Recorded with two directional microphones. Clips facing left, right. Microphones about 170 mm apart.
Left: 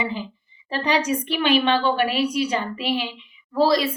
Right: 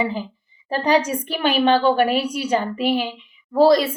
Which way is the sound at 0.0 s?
40° right (ahead or behind).